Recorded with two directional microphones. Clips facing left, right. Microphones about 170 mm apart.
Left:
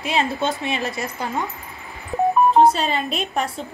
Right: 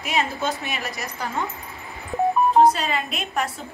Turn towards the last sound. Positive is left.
turn(degrees=30)  # may be behind; listen again after turning